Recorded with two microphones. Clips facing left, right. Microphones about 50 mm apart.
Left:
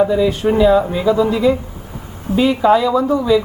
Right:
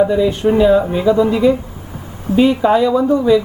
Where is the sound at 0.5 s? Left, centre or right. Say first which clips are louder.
Even; centre.